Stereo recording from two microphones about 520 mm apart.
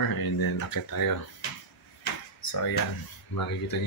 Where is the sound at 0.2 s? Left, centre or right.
Left.